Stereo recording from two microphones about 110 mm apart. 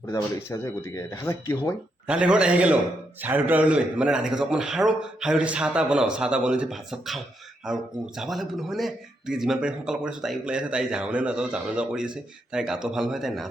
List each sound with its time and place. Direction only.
0.1 s speech: 25° left (ahead or behind)
2.0 s speech: 10° right (ahead or behind)